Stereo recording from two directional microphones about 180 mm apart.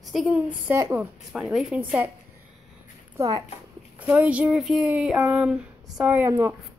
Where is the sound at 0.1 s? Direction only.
5° right (ahead or behind).